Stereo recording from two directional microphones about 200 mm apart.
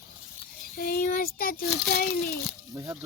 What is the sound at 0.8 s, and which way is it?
A child's voice, 45° left (ahead or behind).